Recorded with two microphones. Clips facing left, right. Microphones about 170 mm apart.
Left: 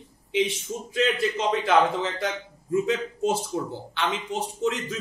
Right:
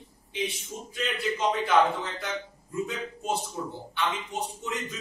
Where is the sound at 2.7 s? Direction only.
90° left.